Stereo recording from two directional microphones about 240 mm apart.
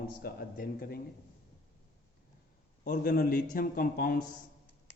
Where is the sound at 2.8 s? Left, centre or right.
Left.